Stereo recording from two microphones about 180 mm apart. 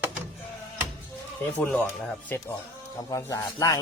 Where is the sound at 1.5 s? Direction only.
10° left (ahead or behind).